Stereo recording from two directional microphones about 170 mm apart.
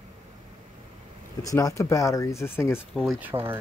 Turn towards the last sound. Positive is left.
turn(degrees=-15)  # may be behind; listen again after turning